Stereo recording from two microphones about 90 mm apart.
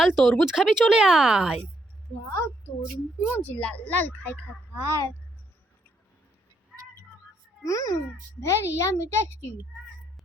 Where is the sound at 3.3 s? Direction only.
20° left (ahead or behind).